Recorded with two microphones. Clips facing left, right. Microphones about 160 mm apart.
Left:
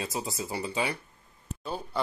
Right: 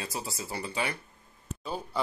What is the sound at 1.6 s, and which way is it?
Speech, 5° right (ahead or behind).